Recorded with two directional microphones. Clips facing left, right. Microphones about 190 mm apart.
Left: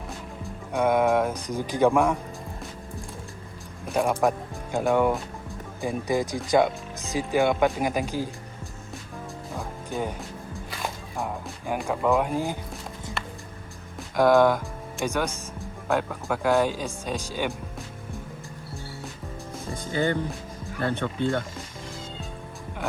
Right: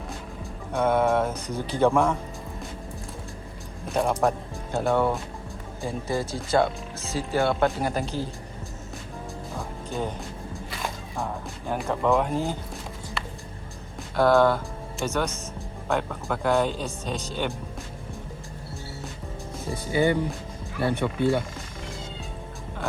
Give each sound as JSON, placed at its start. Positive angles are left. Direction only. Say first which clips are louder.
{"t": 0.7, "sound": "speech", "louder": "left 1 dB", "side_deg": 10}
{"t": 3.9, "sound": "speech", "louder": "even", "side_deg": 10}
{"t": 9.9, "sound": "music", "louder": "even", "side_deg": 10}
{"t": 11.9, "sound": "speech", "louder": "even", "side_deg": 10}
{"t": 14.2, "sound": "speech", "louder": "left 1 dB", "side_deg": 15}
{"t": 19.8, "sound": "music", "louder": "right 3 dB", "side_deg": -10}
{"t": 20.8, "sound": "speech", "louder": "right 3 dB", "side_deg": -10}